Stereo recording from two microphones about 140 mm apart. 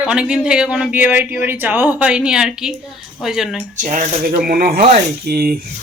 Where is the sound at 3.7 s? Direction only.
60° right (ahead or behind); by 5.6 s 90° right.